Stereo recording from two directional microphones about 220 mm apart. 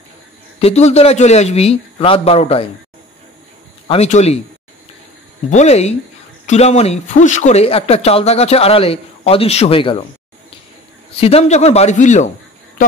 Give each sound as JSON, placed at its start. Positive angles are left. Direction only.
{"t": 0.6, "sound": "speech", "side_deg": 30}
{"t": 3.8, "sound": "speech", "side_deg": 25}
{"t": 5.5, "sound": "speech", "side_deg": 30}
{"t": 11.1, "sound": "a man's voice", "side_deg": 25}